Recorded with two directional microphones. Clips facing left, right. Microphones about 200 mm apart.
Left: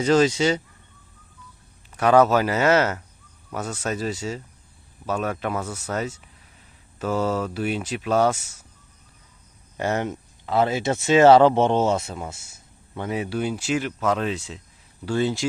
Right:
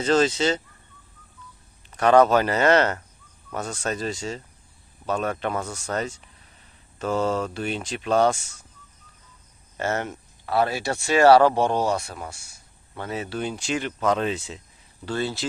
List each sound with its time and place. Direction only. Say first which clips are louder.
0.0 s speech: left 2 dB; 10° left (ahead or behind)
1.9 s speech: even; 5° left (ahead or behind)
9.7 s speech: left 2 dB; 15° left (ahead or behind); by 14.6 s centre (ahead or behind)
15.0 s speech: left 4 dB; 15° left (ahead or behind)